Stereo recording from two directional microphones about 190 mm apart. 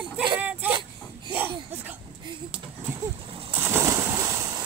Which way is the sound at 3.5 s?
10° right (ahead or behind).